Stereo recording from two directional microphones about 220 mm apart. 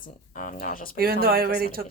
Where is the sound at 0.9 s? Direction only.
45° right (ahead or behind).